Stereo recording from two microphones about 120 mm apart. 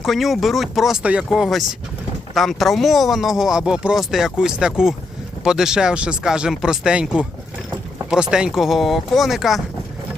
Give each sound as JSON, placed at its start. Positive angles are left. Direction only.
{"t": 0.0, "sound": "speech", "side_deg": 0}